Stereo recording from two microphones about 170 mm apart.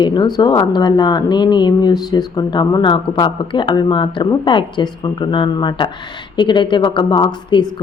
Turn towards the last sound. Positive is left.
turn(degrees=25)  # may be behind; listen again after turning